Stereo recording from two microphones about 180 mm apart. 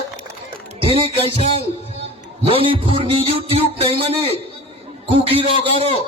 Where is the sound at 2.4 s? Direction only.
30° right (ahead or behind).